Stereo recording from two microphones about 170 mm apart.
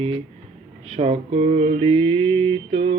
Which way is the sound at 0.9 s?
40° right (ahead or behind).